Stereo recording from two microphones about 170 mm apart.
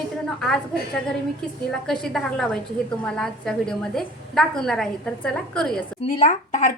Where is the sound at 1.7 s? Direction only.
5° left (ahead or behind).